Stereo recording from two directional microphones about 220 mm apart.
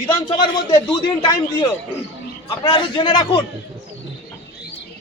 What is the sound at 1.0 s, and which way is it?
A man's voice, 20° left (ahead or behind).